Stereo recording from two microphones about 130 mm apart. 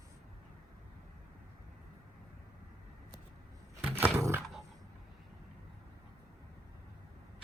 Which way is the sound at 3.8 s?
15° right (ahead or behind).